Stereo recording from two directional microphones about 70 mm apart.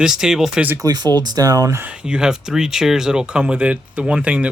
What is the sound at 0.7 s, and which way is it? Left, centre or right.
Speech, right.